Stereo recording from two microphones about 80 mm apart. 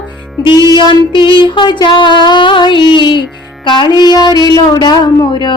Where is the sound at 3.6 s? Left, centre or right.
Left.